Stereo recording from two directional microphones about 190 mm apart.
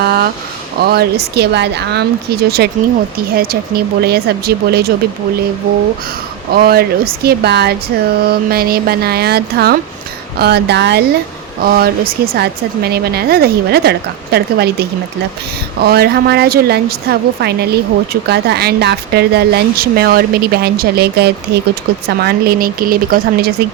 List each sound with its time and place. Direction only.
0.0 s a sound: 55° right (ahead or behind)
0.8 s a woman's voice: 55° right (ahead or behind)
6.5 s a woman's voice: 55° right (ahead or behind)
11.6 s a woman's voice: 50° right (ahead or behind)